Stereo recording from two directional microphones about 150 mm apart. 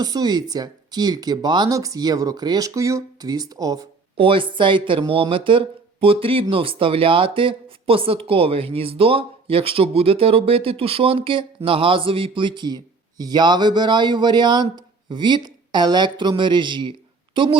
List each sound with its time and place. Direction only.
0.0 s a woman's voice: 25° right (ahead or behind)